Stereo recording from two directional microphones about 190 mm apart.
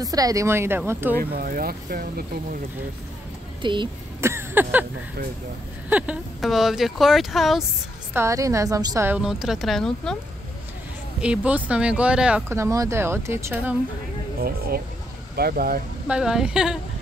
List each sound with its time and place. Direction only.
0.0 s speech: 20° right (ahead or behind)
1.3 s speech: 50° right (ahead or behind)
3.6 s speech: 25° right (ahead or behind)
4.2 s a sound: 15° right (ahead or behind)
5.9 s speech: 5° right (ahead or behind)
8.1 s speech: 15° right (ahead or behind); by 10.1 s centre (ahead or behind)
11.1 s speech: 5° right (ahead or behind)
15.3 s speech: 55° right (ahead or behind)
16.1 s speech: 5° right (ahead or behind)